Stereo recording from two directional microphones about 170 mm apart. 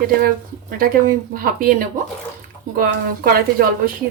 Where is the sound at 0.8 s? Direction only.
55° right (ahead or behind).